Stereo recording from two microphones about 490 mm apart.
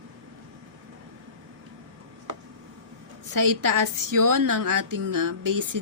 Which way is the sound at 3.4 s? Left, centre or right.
Right.